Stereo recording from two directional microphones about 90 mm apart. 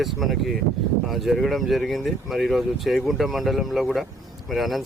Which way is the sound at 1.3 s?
Centre (ahead or behind).